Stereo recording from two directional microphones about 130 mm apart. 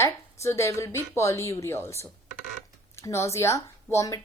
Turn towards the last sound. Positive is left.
turn(degrees=25)  # may be behind; listen again after turning